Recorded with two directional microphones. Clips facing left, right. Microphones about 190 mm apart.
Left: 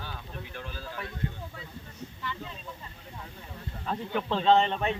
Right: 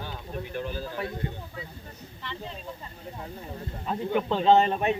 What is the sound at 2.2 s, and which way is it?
Speech, 30° right (ahead or behind).